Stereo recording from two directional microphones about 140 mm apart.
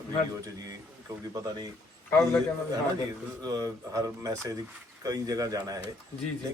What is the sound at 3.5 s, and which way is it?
A man's voice, 25° right (ahead or behind).